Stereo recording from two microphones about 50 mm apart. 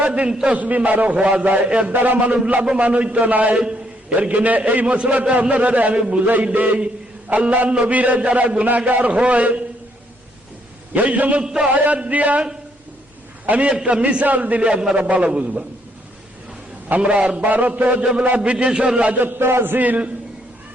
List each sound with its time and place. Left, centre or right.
0.3 s a man's voice: centre
0.5 s a man's voice: right
6.2 s a man's voice: right
10.9 s a man's voice: right
11.4 s a man's voice: centre
13.4 s a man's voice: right
17.0 s a man's voice: right
19.1 s a man's voice: right
19.5 s a man's voice: right
19.7 s a man's voice: right